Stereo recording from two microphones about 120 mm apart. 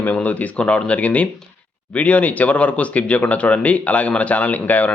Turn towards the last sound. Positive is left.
turn(degrees=15)  # may be behind; listen again after turning